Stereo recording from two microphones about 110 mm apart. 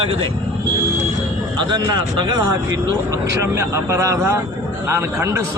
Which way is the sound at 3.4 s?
25° right (ahead or behind).